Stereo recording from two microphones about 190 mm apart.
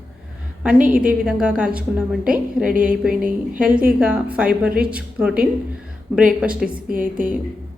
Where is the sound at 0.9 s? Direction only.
5° right (ahead or behind).